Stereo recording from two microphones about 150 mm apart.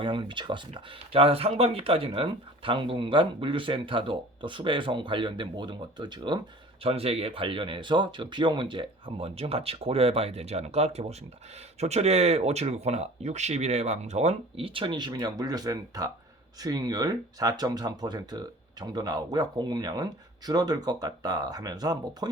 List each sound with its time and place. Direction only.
0.0 s speech: 35° right (ahead or behind)
6.8 s speech: 40° right (ahead or behind); by 22.3 s 25° right (ahead or behind)